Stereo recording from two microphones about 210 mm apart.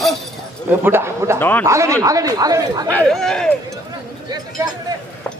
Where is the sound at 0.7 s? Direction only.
10° right (ahead or behind).